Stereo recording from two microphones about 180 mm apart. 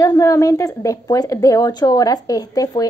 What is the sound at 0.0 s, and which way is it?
A woman's voice, 20° left (ahead or behind).